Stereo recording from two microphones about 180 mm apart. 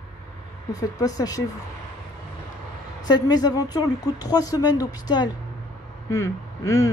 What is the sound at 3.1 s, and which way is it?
Speech, 20° left (ahead or behind).